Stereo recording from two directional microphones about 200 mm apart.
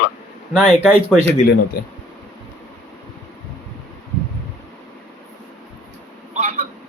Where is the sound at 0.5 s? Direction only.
5° right (ahead or behind).